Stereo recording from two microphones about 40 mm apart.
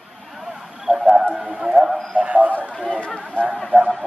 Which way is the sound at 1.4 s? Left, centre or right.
Right.